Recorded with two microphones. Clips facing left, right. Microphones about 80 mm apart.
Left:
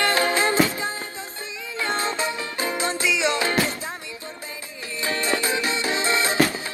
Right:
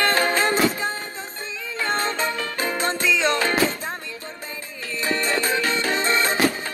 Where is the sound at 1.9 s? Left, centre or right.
Right.